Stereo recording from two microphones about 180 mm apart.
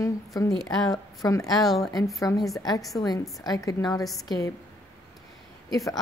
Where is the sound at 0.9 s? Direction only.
20° left (ahead or behind).